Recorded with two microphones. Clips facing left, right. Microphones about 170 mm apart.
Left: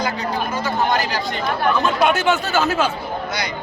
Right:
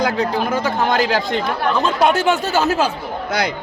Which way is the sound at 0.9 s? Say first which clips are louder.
Right 4 dB; 90° right.